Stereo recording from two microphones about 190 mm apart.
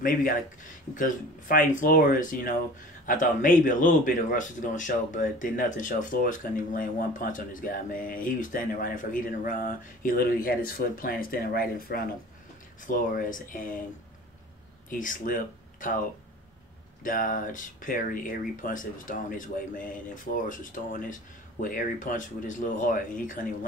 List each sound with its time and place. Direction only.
0.0 s speech: 45° left (ahead or behind)
14.9 s speech: 45° left (ahead or behind)
17.0 s speech: 45° left (ahead or behind)